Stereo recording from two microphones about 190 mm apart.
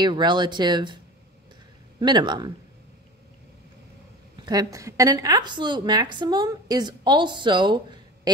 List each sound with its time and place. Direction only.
0.0 s a woman's voice: 25° right (ahead or behind)
4.4 s a woman's voice: 20° right (ahead or behind)